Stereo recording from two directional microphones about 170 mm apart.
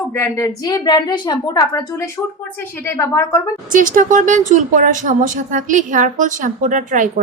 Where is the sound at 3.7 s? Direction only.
50° right (ahead or behind).